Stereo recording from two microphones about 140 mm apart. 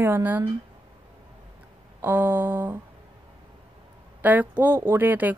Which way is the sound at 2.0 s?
15° right (ahead or behind).